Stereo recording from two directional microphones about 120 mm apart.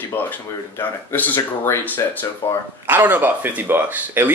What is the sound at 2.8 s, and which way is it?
Speech, 15° right (ahead or behind).